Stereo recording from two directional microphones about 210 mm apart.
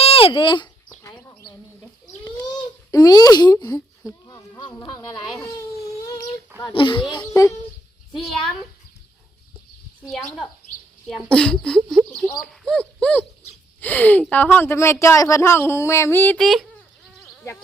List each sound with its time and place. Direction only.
0.0 s a sound: 25° left (ahead or behind)
2.9 s speech: 15° left (ahead or behind)
6.6 s a child's voice: 20° left (ahead or behind)
8.1 s speech: centre (ahead or behind)
11.1 s speech: 5° left (ahead or behind)